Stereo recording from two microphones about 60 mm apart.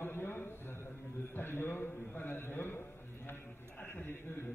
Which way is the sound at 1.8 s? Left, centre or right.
Left.